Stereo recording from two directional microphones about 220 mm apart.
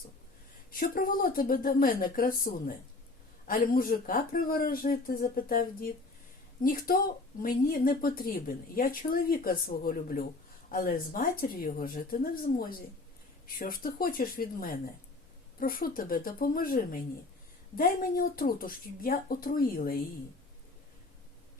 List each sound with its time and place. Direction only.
0.7 s a woman's voice: 40° left (ahead or behind)